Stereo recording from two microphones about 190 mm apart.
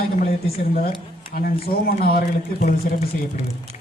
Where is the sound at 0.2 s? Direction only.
45° left (ahead or behind).